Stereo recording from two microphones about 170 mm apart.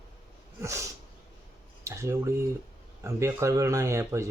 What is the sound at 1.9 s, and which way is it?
Speech, 15° right (ahead or behind).